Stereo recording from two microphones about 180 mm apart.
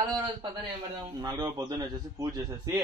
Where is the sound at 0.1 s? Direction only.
25° right (ahead or behind).